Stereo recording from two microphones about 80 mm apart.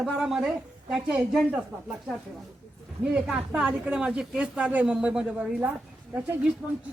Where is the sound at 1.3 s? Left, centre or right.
Centre.